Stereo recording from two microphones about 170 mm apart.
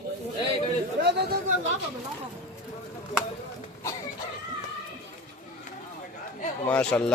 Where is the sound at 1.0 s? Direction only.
75° right (ahead or behind).